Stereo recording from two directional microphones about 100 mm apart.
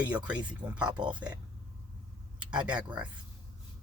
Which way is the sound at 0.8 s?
45° right (ahead or behind).